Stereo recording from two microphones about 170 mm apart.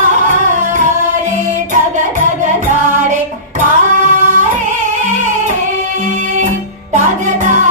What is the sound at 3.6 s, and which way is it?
Singing, 50° right (ahead or behind).